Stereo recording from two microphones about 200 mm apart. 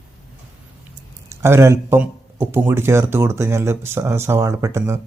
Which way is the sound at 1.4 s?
10° right (ahead or behind).